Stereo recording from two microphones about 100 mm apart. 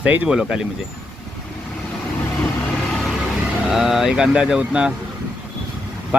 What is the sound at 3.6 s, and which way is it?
Speech, 5° right (ahead or behind).